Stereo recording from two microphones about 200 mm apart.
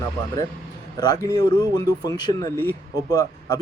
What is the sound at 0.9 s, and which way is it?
Speech, 20° left (ahead or behind).